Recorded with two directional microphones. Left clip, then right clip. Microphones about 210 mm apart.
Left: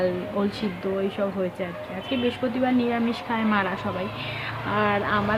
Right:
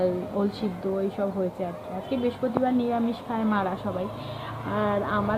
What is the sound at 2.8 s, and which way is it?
Speech, 15° left (ahead or behind).